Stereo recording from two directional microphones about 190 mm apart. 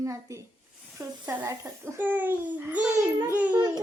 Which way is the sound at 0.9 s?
15° right (ahead or behind).